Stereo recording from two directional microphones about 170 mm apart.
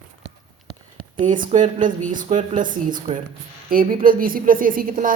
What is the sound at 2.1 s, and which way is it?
A woman's voice, 50° right (ahead or behind).